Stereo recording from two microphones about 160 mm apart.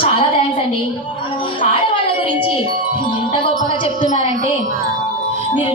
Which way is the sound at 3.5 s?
60° right (ahead or behind).